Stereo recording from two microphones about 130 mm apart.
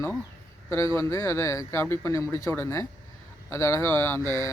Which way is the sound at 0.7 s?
20° left (ahead or behind).